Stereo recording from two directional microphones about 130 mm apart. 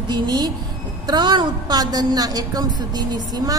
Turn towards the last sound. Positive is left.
turn(degrees=-30)  # may be behind; listen again after turning